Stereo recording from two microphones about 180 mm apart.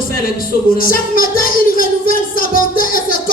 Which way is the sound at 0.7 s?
55° left (ahead or behind).